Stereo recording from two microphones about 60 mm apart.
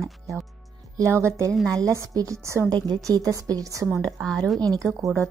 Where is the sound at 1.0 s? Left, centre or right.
Right.